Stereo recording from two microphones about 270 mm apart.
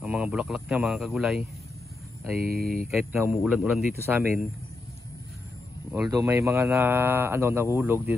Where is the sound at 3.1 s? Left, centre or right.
Centre.